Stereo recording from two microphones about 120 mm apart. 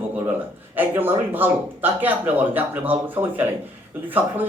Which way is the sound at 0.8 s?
15° right (ahead or behind).